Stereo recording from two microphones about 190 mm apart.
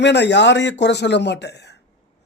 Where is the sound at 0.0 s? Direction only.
65° left (ahead or behind).